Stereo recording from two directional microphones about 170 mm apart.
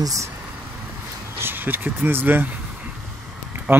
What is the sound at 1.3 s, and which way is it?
Speech, 10° right (ahead or behind).